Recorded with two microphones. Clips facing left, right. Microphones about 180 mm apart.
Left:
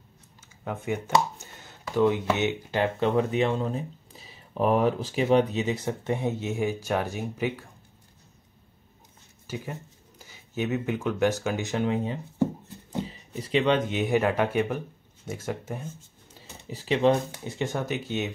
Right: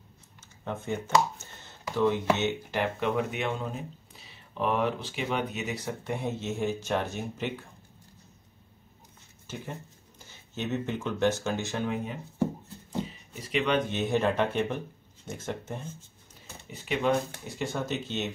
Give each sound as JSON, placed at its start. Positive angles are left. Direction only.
{"t": 0.7, "sound": "speech", "side_deg": 10}
{"t": 1.4, "sound": "a sound", "side_deg": 15}
{"t": 2.3, "sound": "speech", "side_deg": 15}
{"t": 3.0, "sound": "speech", "side_deg": 30}
{"t": 9.5, "sound": "speech", "side_deg": 10}
{"t": 13.3, "sound": "speech", "side_deg": 30}
{"t": 13.8, "sound": "speech", "side_deg": 10}
{"t": 16.6, "sound": "speech", "side_deg": 35}
{"t": 17.6, "sound": "speech", "side_deg": 15}